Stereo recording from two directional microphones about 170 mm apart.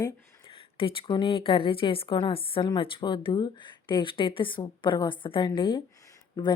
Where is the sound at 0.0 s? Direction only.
30° left (ahead or behind).